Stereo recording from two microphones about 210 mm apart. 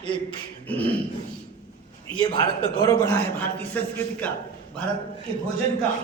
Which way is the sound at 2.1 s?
20° left (ahead or behind).